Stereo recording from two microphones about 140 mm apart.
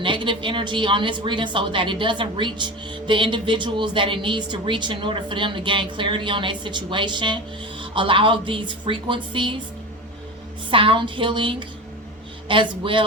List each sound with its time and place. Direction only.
0.0 s speech: 35° right (ahead or behind)
10.7 s speech: 40° right (ahead or behind)